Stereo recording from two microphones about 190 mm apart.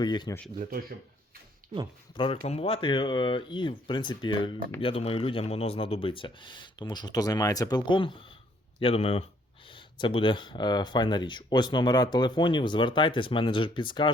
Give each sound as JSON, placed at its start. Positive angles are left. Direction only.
{"t": 0.0, "sound": "speech", "side_deg": 20}
{"t": 0.6, "sound": "speech", "side_deg": -50}
{"t": 2.1, "sound": "speech", "side_deg": 30}